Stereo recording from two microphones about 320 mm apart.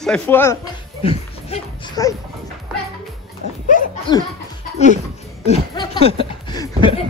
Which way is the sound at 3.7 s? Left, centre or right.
Left.